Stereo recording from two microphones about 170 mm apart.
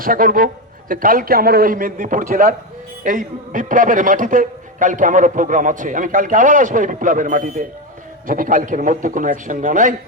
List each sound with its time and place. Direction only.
0.0 s a man's voice: 55° right (ahead or behind)